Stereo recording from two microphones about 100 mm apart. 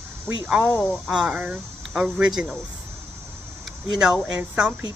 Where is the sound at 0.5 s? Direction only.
10° right (ahead or behind).